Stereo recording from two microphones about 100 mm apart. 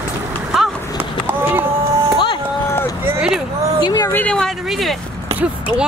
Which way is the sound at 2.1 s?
55° left (ahead or behind).